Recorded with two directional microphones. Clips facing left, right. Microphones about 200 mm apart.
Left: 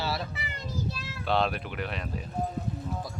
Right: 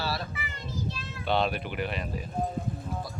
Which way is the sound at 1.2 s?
Centre (ahead or behind).